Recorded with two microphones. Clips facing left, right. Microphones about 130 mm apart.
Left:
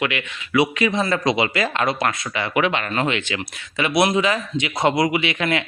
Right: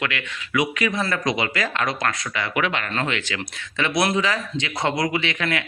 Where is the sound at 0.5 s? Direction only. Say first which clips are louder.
Left 4 dB; 25° left (ahead or behind).